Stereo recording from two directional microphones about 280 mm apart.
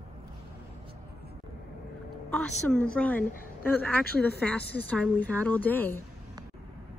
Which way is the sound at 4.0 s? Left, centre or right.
Left.